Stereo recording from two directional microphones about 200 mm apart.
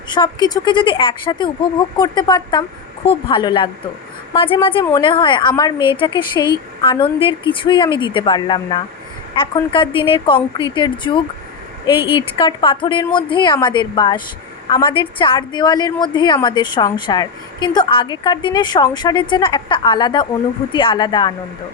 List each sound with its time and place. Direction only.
0.1 s a woman's voice: 20° left (ahead or behind)